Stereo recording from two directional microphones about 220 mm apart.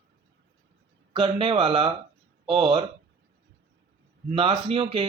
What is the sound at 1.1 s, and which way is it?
Speech, 25° right (ahead or behind).